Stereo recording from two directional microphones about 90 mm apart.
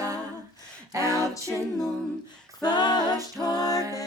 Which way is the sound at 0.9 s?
35° right (ahead or behind).